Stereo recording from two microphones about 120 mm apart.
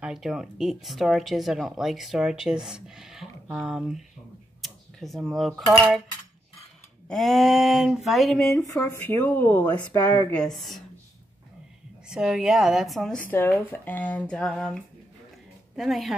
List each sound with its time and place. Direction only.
0.0 s speech: 5° right (ahead or behind)
4.6 s a sound: centre (ahead or behind)
5.7 s speech: centre (ahead or behind)
7.1 s speech: centre (ahead or behind)
8.9 s speech: 20° left (ahead or behind)
10.3 s speech: 5° left (ahead or behind)
12.1 s speech: 5° right (ahead or behind)
13.3 s speech: 20° left (ahead or behind); by 16.2 s centre (ahead or behind)